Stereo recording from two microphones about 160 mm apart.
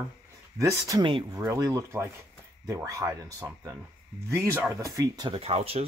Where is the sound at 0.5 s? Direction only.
20° right (ahead or behind).